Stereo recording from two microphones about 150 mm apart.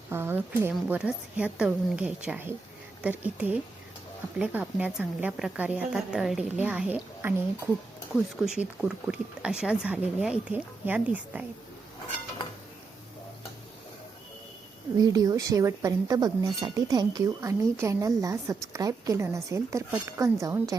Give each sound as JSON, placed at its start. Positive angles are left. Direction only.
{"t": 0.1, "sound": "speech", "side_deg": -15}
{"t": 14.9, "sound": "speech", "side_deg": -25}